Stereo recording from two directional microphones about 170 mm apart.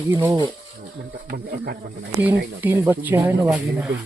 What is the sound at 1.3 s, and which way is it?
Speech, 65° right (ahead or behind).